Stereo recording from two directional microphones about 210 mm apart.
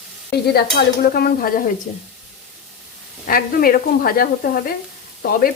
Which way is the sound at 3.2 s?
45° left (ahead or behind).